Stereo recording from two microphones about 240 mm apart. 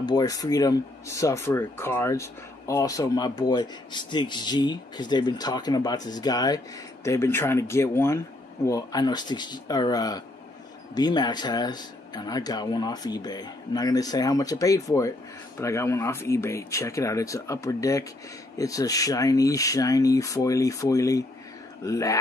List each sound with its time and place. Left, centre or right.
0.0 s a man's voice: centre